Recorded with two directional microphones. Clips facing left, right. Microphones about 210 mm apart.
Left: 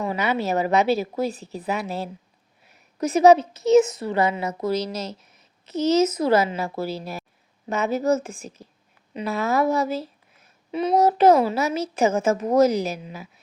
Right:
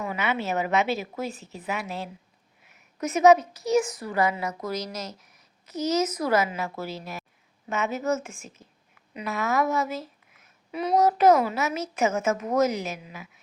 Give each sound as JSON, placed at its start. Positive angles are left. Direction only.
{"t": 0.0, "sound": "a woman's voice", "side_deg": 35}